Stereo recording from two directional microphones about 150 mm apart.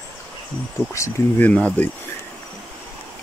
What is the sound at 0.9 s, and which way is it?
Speech, 20° left (ahead or behind).